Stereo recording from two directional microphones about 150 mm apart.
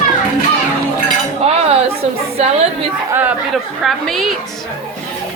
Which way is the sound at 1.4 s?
45° right (ahead or behind).